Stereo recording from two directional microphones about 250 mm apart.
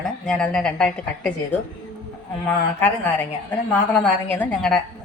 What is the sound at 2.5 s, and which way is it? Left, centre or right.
A woman's voice, centre.